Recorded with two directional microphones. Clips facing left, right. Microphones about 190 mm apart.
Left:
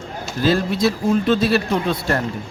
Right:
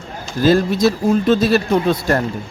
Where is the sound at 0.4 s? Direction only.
45° right (ahead or behind).